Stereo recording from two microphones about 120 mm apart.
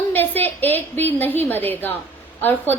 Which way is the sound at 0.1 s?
15° left (ahead or behind).